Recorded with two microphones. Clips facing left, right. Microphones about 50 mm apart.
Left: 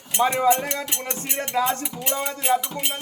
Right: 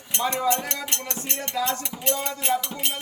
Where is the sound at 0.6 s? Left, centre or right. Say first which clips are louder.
Left 3 dB; centre.